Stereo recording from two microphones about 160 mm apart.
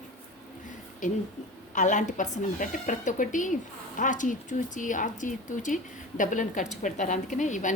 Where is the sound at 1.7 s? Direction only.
50° left (ahead or behind).